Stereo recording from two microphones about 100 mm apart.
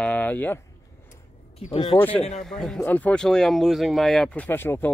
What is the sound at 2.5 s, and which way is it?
Speech, 5° left (ahead or behind).